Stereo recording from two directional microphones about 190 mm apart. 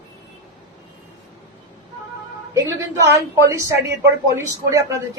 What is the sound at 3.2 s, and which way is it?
A woman's voice, 15° right (ahead or behind).